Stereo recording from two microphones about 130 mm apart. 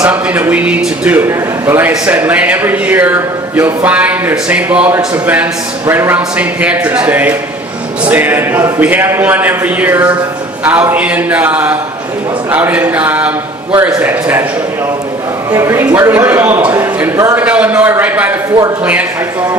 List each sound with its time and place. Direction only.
0.0 s speech: 10° right (ahead or behind)
15.5 s speech: 20° right (ahead or behind)